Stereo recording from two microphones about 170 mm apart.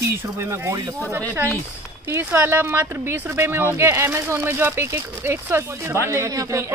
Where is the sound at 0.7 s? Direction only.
25° right (ahead or behind).